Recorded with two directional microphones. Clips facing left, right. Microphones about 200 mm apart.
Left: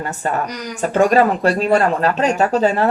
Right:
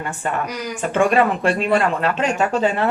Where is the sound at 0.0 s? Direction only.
40° left (ahead or behind).